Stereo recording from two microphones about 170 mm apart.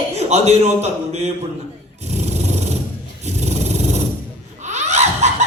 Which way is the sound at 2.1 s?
40° right (ahead or behind).